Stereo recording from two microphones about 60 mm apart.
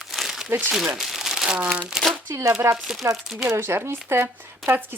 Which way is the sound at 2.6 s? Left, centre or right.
Right.